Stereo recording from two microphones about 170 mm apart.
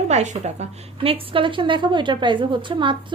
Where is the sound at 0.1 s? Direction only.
40° right (ahead or behind).